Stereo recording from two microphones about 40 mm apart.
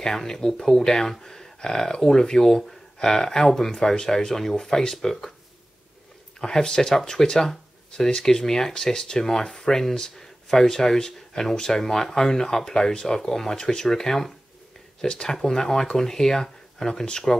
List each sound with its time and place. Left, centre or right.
0.0 s speech: centre
6.4 s speech: centre